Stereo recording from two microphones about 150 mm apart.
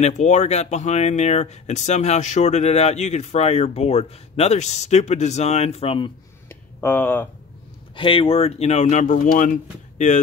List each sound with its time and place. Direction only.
0.0 s speech: 50° left (ahead or behind)
6.5 s a sound: 15° left (ahead or behind)
7.9 s speech: 35° left (ahead or behind); by 10.2 s 55° left (ahead or behind)